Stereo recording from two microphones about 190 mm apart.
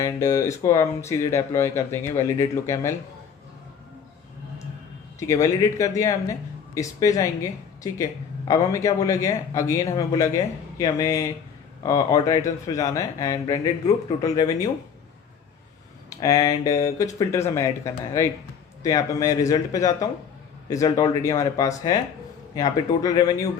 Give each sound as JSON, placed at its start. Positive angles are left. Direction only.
{"t": 0.0, "sound": "speech", "side_deg": 15}
{"t": 5.3, "sound": "speech", "side_deg": 15}
{"t": 8.4, "sound": "speech", "side_deg": 15}
{"t": 16.0, "sound": "speech", "side_deg": 20}